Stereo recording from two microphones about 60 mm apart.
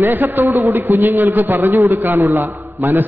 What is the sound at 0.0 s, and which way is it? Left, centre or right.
Speech, right.